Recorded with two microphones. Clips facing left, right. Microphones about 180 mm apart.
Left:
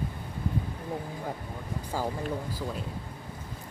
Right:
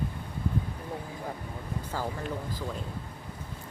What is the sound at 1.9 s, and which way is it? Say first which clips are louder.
Speech: left 3 dB; 15° left (ahead or behind).